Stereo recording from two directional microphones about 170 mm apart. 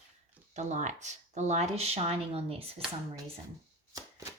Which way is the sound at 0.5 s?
45° right (ahead or behind).